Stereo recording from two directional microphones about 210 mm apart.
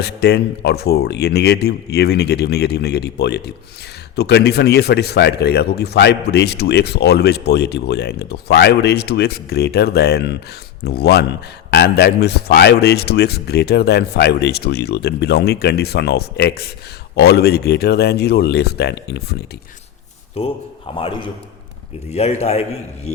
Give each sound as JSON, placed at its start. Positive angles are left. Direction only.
{"t": 0.0, "sound": "speech", "side_deg": 50}
{"t": 20.4, "sound": "a man's voice", "side_deg": 30}